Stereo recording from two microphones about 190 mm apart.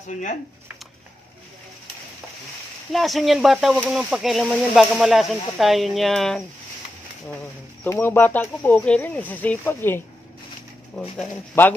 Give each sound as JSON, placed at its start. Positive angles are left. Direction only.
{"t": 0.1, "sound": "speech", "side_deg": 40}
{"t": 2.9, "sound": "speech", "side_deg": 0}
{"t": 7.8, "sound": "speech", "side_deg": 10}